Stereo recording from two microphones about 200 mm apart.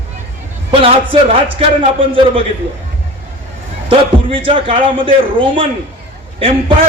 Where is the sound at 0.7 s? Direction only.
30° right (ahead or behind).